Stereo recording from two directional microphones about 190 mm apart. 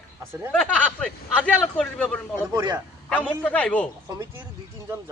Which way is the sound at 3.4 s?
5° left (ahead or behind).